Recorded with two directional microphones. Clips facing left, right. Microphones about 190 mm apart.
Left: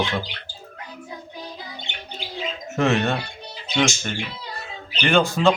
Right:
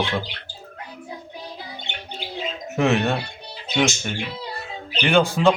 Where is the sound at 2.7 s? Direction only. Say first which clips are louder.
Right 1 dB; centre (ahead or behind).